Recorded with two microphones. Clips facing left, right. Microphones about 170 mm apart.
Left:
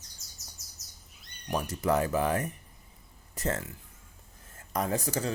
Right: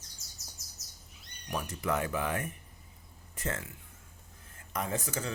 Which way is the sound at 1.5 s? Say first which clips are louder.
Left 5 dB; 40° left (ahead or behind).